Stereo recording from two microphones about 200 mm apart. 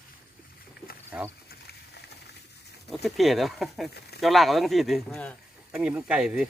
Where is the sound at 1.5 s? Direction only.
55° left (ahead or behind).